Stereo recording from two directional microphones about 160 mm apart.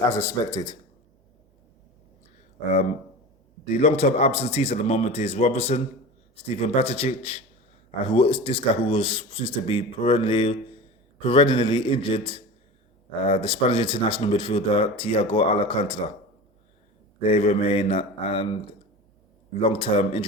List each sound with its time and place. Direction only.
0.1 s speech: 20° left (ahead or behind)
3.7 s speech: 45° left (ahead or behind)
17.2 s speech: 35° left (ahead or behind)
19.5 s speech: 35° left (ahead or behind)